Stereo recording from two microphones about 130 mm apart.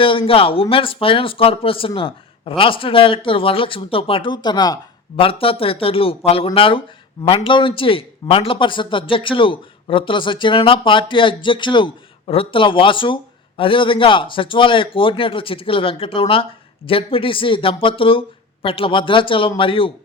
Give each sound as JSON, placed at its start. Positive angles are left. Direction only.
{"t": 0.0, "sound": "a man's voice", "side_deg": 45}
{"t": 5.1, "sound": "a man's voice", "side_deg": 45}